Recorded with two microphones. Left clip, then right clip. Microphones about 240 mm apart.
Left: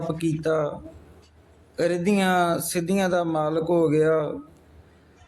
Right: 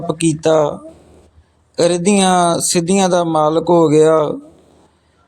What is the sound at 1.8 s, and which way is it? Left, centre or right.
A man's voice, right.